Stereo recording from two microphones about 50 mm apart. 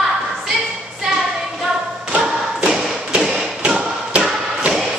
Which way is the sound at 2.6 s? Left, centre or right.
Centre.